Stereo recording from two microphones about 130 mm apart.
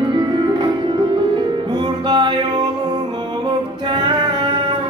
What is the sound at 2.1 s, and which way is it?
Music, 35° right (ahead or behind).